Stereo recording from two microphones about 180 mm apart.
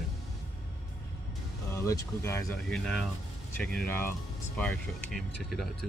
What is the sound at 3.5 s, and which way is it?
Speech, 5° left (ahead or behind).